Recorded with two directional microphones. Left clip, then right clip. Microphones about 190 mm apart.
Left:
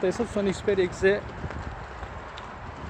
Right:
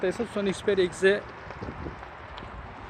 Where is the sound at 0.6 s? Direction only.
25° right (ahead or behind).